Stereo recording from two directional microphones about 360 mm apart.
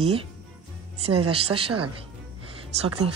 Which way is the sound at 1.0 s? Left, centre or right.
Right.